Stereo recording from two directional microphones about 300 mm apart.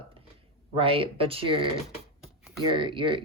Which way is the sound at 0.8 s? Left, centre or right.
Centre.